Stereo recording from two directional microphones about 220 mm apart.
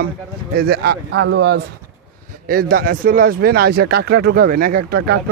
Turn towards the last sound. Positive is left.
turn(degrees=-45)  # may be behind; listen again after turning